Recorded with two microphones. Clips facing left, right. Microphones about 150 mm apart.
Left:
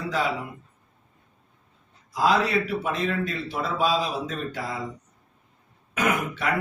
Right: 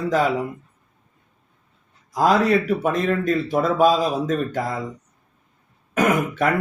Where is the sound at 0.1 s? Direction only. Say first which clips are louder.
Right 6 dB; 45° right (ahead or behind).